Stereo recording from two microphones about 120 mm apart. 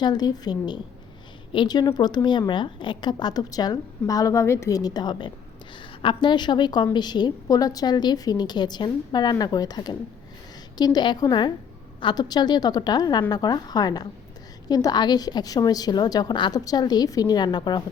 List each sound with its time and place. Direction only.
0.0 s a woman's voice: 35° left (ahead or behind)